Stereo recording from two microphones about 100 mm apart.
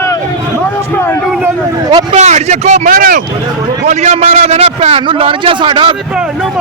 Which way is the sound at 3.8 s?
90° right.